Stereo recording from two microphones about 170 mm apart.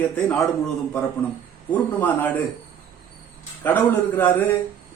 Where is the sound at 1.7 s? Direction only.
10° left (ahead or behind).